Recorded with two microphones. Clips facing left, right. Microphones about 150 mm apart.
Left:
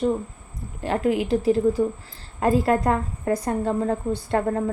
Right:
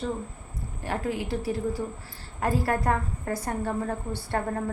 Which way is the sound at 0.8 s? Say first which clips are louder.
Left 8 dB; 20° left (ahead or behind).